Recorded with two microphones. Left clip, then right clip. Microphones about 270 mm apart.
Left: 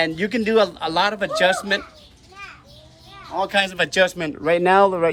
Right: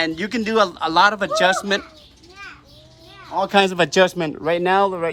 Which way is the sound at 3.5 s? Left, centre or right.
Centre.